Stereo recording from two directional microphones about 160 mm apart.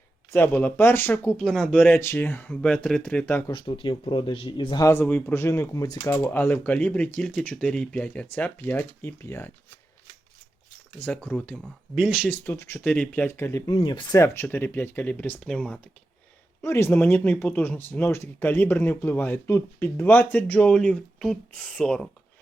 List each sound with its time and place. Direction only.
0.3 s speech: 10° left (ahead or behind)
3.5 s a man's voice: 30° left (ahead or behind)
6.1 s speech: 10° left (ahead or behind)
11.0 s speech: 10° left (ahead or behind)
12.3 s a man's voice: 15° left (ahead or behind)
14.2 s speech: 15° left (ahead or behind)